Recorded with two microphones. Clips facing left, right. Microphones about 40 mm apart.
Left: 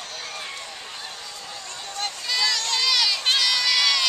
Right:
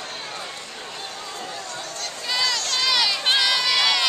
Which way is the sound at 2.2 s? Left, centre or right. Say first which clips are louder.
Right 1 dB; centre.